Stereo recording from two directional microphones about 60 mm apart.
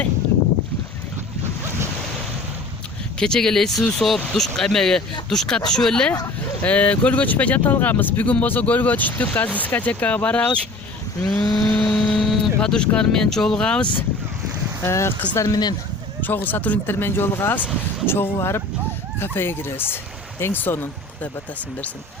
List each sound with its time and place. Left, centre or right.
3.2 s speech: centre
11.3 s a sound: left
11.9 s a sound: centre
12.5 s speech: centre
14.8 s speech: left
15.4 s speech: left
16.2 s speech: left
16.8 s speech: left